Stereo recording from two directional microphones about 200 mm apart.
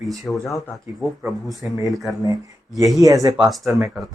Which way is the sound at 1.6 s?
10° right (ahead or behind).